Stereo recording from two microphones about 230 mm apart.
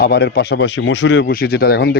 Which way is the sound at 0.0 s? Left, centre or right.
Left.